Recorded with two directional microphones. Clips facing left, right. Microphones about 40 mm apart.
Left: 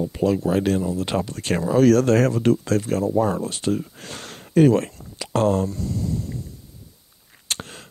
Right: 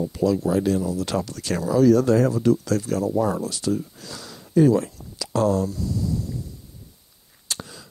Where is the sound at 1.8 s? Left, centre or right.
Left.